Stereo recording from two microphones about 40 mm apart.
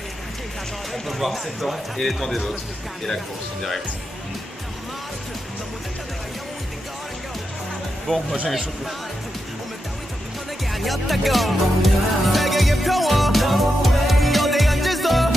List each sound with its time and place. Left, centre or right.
0.9 s speech: centre
8.1 s speech: left
10.7 s music: centre